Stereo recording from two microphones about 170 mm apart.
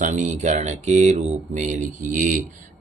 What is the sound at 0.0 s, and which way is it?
Speech, 45° right (ahead or behind).